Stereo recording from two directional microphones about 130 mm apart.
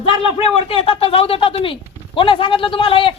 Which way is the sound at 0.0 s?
45° left (ahead or behind).